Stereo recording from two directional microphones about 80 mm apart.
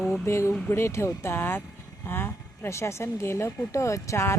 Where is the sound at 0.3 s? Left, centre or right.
Left.